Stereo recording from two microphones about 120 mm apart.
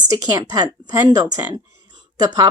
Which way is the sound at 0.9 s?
35° right (ahead or behind).